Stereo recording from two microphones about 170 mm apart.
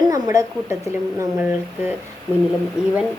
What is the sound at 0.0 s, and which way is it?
A woman's voice, 20° right (ahead or behind).